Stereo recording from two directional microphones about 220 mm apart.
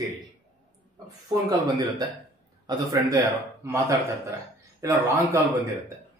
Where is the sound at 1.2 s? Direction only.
15° right (ahead or behind).